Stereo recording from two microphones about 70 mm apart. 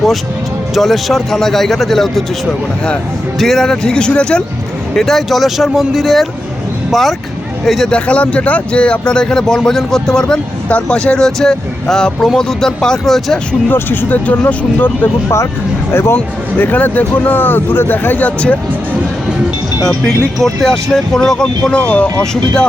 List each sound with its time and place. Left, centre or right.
0.7 s speech: centre
3.3 s speech: centre
4.9 s speech: centre
7.9 s speech: centre
13.7 s speech: left
15.9 s speech: left
16.1 s speech: left
20.1 s speech: centre